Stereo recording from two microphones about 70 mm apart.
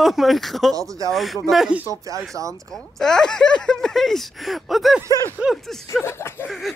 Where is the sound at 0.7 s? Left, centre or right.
Right.